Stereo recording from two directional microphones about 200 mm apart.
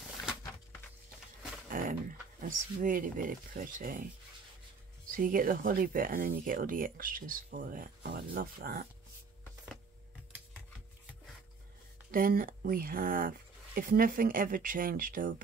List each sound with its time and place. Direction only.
1.7 s speech: 45° right (ahead or behind)
5.1 s speech: 45° right (ahead or behind)
12.1 s speech: 45° right (ahead or behind)